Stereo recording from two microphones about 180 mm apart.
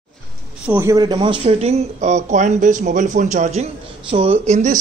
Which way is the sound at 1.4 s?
35° right (ahead or behind).